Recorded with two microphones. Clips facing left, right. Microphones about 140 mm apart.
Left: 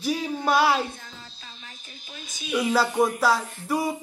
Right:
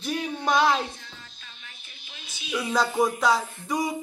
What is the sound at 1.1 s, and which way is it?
Music, 35° left (ahead or behind).